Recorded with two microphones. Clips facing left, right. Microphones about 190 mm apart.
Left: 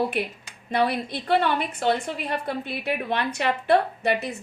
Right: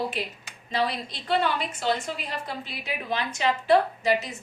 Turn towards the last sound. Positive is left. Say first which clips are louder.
# even
turn(degrees=60)  # may be behind; listen again after turning